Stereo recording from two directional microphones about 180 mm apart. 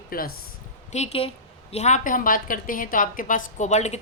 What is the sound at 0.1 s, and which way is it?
Speech, 55° left (ahead or behind).